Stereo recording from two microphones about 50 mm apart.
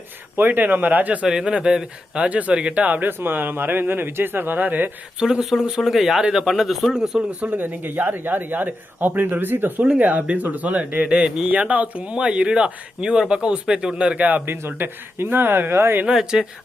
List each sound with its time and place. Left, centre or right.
0.3 s speech: right
1.2 s speech: centre
2.8 s speech: right
3.1 s speech: right
5.2 s a man's voice: centre
6.9 s speech: centre
7.3 s speech: right
7.6 s speech: right
10.0 s speech: right
14.2 s speech: right
14.4 s speech: right
16.0 s speech: centre